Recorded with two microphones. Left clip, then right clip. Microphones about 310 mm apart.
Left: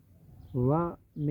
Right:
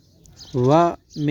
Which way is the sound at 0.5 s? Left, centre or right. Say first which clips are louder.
Right 13 dB; right.